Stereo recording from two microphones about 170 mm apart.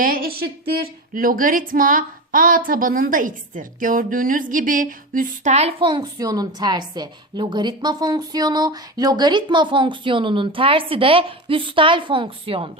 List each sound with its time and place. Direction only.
0.0 s speech: 60° right (ahead or behind); by 12.7 s 30° right (ahead or behind)